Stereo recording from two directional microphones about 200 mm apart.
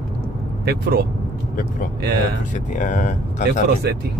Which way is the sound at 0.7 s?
50° right (ahead or behind).